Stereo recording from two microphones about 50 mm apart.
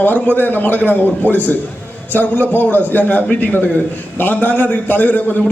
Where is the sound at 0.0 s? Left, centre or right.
Left.